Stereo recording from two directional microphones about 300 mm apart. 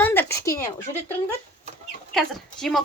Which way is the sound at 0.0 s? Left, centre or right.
Centre.